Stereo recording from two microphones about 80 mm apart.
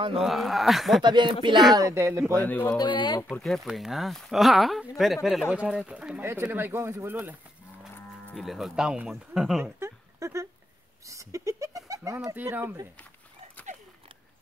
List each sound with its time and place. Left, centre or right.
0.2 s speech: centre
1.0 s speech: right
1.7 s speech: right
2.4 s speech: left
2.8 s speech: left
3.4 s speech: centre
6.5 s speech: right
8.4 s speech: centre
9.8 s a sound: right
11.1 s goat: right
12.4 s speech: right